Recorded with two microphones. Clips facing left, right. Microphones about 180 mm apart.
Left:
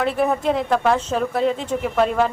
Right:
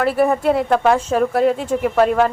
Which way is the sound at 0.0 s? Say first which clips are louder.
Right 4 dB; 5° right (ahead or behind).